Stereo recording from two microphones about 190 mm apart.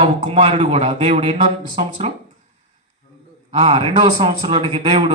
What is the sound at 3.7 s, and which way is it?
Speech, 25° right (ahead or behind).